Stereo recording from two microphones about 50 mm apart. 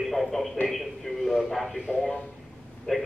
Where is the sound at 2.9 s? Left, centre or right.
Centre.